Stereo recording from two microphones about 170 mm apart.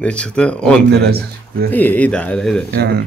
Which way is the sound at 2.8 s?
70° right (ahead or behind).